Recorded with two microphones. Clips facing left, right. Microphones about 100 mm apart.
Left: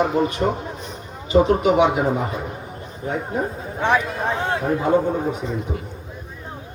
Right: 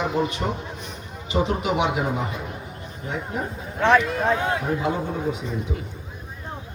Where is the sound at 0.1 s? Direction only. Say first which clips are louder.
Left 4 dB; 40° left (ahead or behind).